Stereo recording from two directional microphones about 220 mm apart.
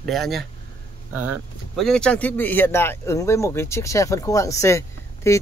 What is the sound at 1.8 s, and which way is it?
Speech, 5° left (ahead or behind).